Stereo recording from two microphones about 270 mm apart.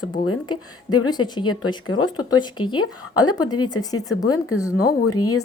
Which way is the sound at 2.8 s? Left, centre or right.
Left.